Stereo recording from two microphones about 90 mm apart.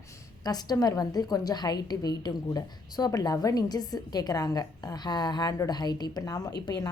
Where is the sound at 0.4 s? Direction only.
45° left (ahead or behind).